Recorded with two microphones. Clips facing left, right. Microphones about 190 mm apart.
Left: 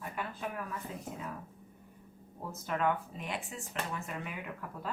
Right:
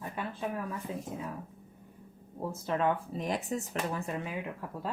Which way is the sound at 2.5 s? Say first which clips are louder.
Right 2 dB; 30° right (ahead or behind).